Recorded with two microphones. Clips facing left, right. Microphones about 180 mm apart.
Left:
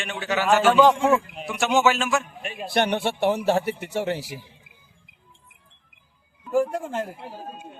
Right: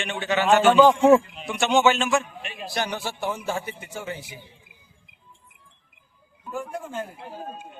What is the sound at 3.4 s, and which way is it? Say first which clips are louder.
Speech: left 8 dB; 70° left (ahead or behind).